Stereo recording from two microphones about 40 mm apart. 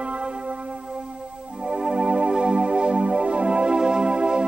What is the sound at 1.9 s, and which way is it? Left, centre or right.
Music, right.